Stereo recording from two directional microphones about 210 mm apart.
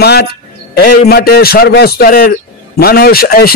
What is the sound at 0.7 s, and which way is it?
A man's voice, 45° left (ahead or behind).